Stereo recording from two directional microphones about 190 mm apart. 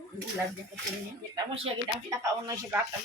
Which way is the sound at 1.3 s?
25° right (ahead or behind).